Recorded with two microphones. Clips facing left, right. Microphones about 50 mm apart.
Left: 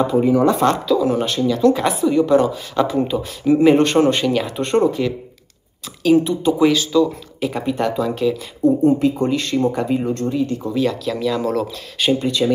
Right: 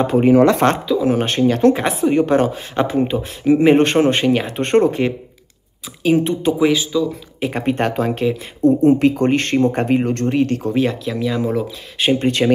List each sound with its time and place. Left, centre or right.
0.0 s speech: right
0.7 s speech: centre
1.0 s speech: right
7.3 s speech: right
10.7 s speech: right
11.1 s speech: centre
12.0 s speech: right
12.3 s speech: right